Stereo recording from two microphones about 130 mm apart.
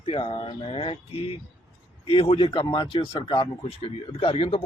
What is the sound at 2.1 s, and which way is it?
Speech, 45° left (ahead or behind).